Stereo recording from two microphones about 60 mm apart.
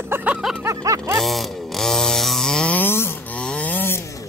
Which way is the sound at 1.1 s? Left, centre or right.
Centre.